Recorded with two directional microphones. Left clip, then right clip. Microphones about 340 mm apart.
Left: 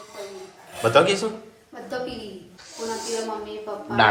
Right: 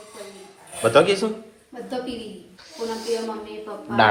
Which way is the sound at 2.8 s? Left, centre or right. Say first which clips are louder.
Right 2 dB; centre.